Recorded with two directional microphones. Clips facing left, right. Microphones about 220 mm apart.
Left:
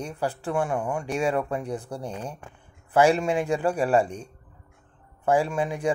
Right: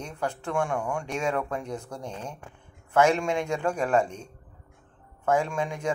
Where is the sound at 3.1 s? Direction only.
5° left (ahead or behind).